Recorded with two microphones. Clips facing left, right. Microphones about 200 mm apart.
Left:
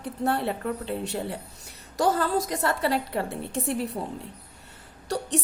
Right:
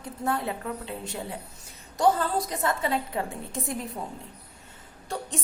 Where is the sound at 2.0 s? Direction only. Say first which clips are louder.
Even; 90° left.